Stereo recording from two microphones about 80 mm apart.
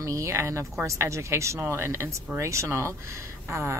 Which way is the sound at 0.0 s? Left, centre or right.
Right.